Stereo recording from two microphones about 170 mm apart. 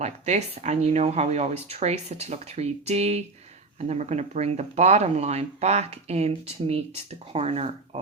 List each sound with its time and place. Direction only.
0.0 s speech: 40° right (ahead or behind)